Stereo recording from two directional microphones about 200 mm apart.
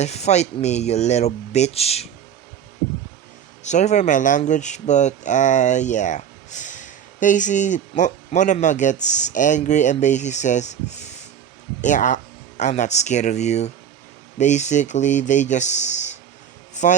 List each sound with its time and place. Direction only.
0.0 s speech: 35° left (ahead or behind)
3.6 s speech: 35° left (ahead or behind)
11.8 s speech: 40° left (ahead or behind)